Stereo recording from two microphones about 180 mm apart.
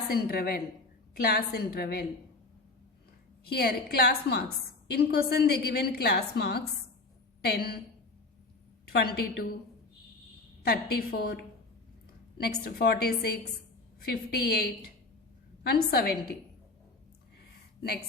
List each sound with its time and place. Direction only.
0.1 s a woman's voice: 60° left (ahead or behind)
3.5 s a woman's voice: 60° left (ahead or behind)
8.9 s a woman's voice: 60° left (ahead or behind)
10.6 s a woman's voice: 60° left (ahead or behind)